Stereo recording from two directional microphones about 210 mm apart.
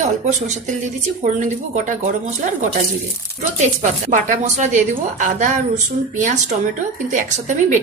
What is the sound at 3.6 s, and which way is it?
Speech, 35° right (ahead or behind).